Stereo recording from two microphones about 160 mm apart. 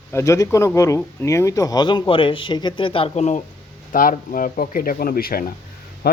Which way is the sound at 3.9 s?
60° left (ahead or behind).